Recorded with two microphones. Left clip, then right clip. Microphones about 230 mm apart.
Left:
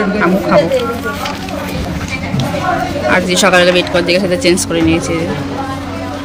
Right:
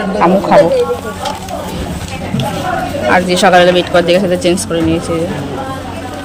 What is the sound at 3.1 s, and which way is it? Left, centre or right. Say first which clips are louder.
A woman's voice: right 2 dB; centre.